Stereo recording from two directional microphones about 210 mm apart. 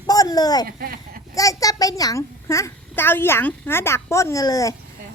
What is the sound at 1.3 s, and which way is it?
A woman's voice, 15° left (ahead or behind).